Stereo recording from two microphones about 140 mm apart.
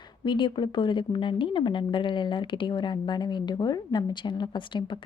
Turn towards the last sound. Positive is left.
turn(degrees=35)  # may be behind; listen again after turning